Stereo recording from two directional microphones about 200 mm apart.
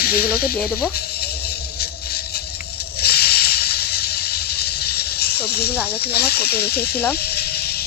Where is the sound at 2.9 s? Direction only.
50° left (ahead or behind).